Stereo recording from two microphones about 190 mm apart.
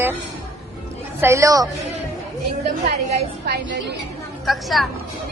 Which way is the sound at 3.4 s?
60° right (ahead or behind).